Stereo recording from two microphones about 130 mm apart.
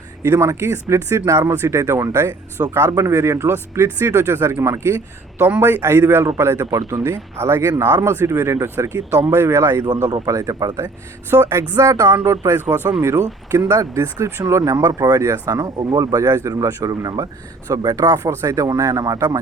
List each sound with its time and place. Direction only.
0.2 s a man's voice: 20° right (ahead or behind)
11.3 s a man's voice: 15° right (ahead or behind)